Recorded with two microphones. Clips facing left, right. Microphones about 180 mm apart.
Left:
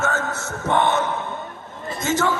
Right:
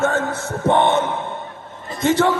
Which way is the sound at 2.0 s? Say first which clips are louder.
Right 5 dB; 30° right (ahead or behind).